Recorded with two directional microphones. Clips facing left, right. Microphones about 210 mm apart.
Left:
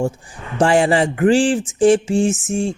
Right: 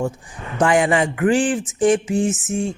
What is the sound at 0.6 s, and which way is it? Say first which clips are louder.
A man's voice: left 2 dB; 30° left (ahead or behind).